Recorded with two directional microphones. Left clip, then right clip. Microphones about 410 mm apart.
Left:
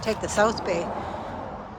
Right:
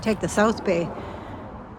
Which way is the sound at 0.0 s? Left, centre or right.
Centre.